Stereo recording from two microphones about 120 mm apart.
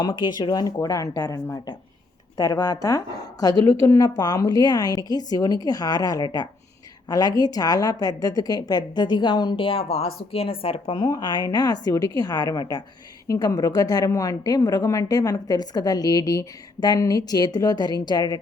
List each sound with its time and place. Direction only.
0.0 s a woman's voice: 40° left (ahead or behind)
2.4 s a woman's voice: 35° left (ahead or behind); by 10.9 s 50° left (ahead or behind)
10.9 s a woman's voice: 35° left (ahead or behind)